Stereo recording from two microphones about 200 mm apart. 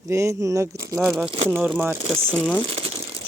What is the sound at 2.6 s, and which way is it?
Crumpling, 25° right (ahead or behind).